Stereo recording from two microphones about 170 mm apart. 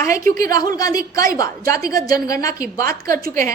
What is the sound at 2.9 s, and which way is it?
Speech, 55° right (ahead or behind).